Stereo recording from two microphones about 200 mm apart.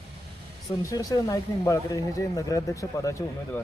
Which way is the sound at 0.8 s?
20° left (ahead or behind).